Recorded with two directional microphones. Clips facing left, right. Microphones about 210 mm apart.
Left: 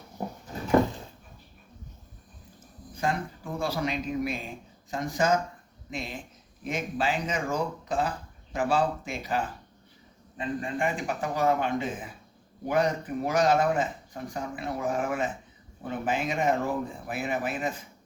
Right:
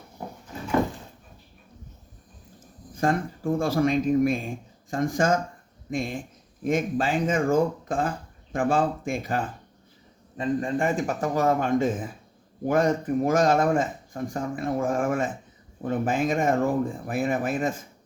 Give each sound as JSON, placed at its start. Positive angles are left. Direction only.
{"t": 2.9, "sound": "speech", "side_deg": -50}